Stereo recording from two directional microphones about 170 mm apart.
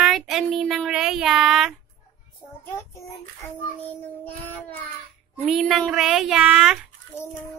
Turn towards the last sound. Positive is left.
turn(degrees=15)  # may be behind; listen again after turning